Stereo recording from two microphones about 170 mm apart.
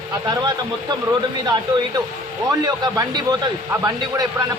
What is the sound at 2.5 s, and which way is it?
Speech, 20° right (ahead or behind).